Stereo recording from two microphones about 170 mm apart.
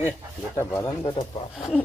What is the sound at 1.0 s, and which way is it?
Speech, 30° left (ahead or behind).